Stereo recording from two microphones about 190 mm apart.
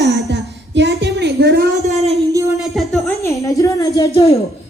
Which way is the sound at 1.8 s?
35° right (ahead or behind).